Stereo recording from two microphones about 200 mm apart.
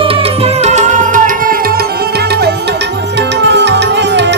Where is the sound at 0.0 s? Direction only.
30° right (ahead or behind).